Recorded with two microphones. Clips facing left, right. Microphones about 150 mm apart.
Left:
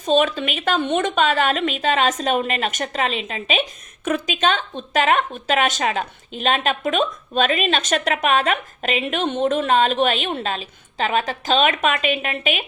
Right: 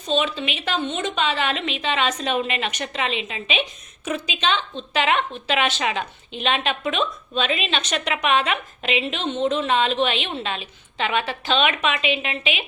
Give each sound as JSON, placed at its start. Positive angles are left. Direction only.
{"t": 0.0, "sound": "a woman's voice", "side_deg": 50}